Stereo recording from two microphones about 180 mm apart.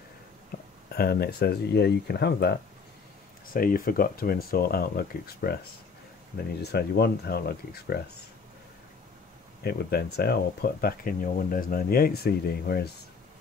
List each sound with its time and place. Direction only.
0.8 s speech: 60° left (ahead or behind)
3.5 s speech: 55° left (ahead or behind)
9.6 s speech: 60° left (ahead or behind)